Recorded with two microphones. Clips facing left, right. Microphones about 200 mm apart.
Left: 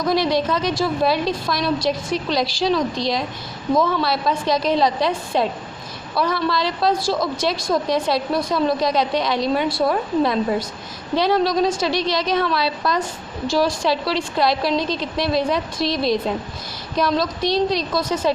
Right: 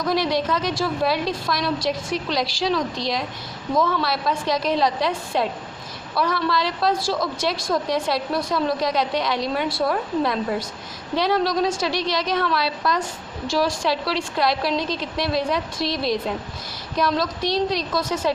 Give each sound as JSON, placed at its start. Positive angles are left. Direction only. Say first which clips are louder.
{"t": 0.0, "sound": "a woman's voice", "louder": "left 3 dB", "side_deg": 25}